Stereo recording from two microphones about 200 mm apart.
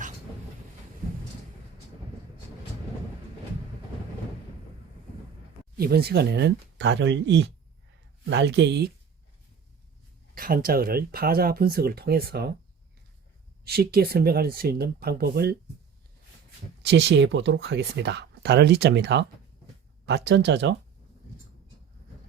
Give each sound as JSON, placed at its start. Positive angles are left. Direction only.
{"t": 5.7, "sound": "speech", "side_deg": -50}
{"t": 10.3, "sound": "speech", "side_deg": -45}
{"t": 13.7, "sound": "speech", "side_deg": -50}
{"t": 16.8, "sound": "speech", "side_deg": -60}